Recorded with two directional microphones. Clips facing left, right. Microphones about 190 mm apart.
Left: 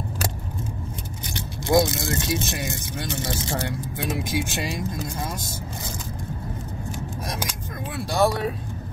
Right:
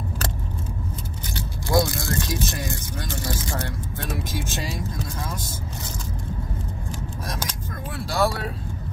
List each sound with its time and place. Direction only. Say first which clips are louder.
1.3 s speech: left 2 dB; 20° left (ahead or behind)
7.9 s speech: left 2 dB; 20° left (ahead or behind)